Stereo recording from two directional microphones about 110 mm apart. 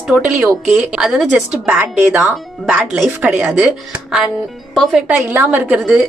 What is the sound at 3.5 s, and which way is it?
Speech, centre (ahead or behind).